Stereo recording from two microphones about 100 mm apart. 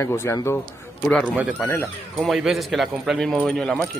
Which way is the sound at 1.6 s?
20° left (ahead or behind).